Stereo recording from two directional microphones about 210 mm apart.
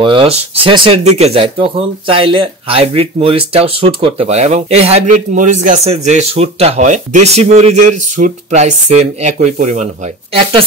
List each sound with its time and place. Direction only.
0.0 s speech: 25° right (ahead or behind)